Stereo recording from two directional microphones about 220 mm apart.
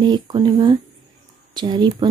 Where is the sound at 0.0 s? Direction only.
20° right (ahead or behind).